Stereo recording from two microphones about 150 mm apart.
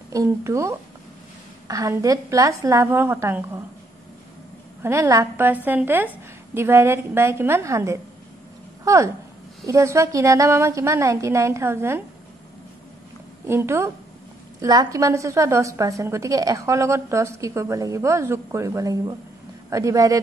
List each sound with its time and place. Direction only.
0.1 s a woman's voice: 20° right (ahead or behind)
4.8 s a woman's voice: 20° right (ahead or behind)
13.5 s a woman's voice: 15° right (ahead or behind)